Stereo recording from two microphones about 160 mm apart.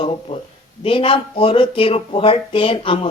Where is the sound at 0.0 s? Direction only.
35° left (ahead or behind).